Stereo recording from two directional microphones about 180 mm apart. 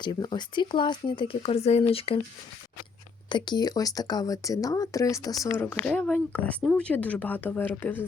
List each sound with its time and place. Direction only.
0.0 s speech: 25° left (ahead or behind)
3.2 s speech: 25° left (ahead or behind)
5.5 s speech: 10° left (ahead or behind)